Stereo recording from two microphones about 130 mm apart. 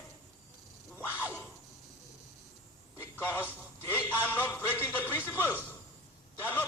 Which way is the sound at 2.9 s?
15° left (ahead or behind).